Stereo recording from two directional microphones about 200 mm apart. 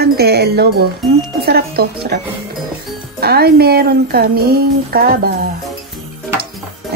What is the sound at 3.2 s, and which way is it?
Speech, 50° right (ahead or behind).